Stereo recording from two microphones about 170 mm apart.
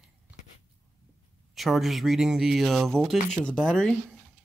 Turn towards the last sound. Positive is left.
turn(degrees=5)  # may be behind; listen again after turning